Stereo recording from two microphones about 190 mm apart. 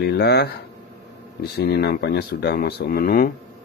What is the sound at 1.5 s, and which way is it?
A man's voice, 60° left (ahead or behind).